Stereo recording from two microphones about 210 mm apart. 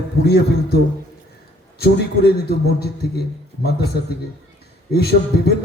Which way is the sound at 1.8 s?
50° left (ahead or behind).